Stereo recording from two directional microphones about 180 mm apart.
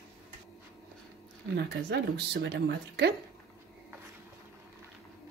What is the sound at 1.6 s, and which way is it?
A woman's voice, 65° right (ahead or behind).